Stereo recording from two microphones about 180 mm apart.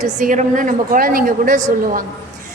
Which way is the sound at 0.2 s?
45° right (ahead or behind).